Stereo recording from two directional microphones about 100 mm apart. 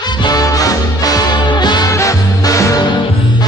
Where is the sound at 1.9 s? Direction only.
35° left (ahead or behind).